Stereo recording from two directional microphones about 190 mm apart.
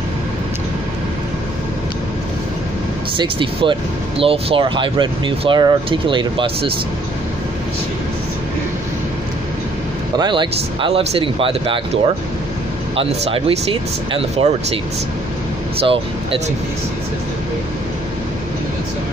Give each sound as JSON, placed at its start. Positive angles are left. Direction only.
{"t": 3.2, "sound": "speech", "side_deg": -25}
{"t": 10.1, "sound": "speech", "side_deg": -25}
{"t": 15.8, "sound": "speech", "side_deg": -30}